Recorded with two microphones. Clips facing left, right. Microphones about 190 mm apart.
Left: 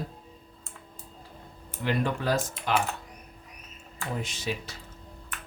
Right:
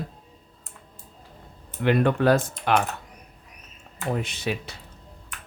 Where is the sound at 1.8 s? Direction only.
60° right (ahead or behind).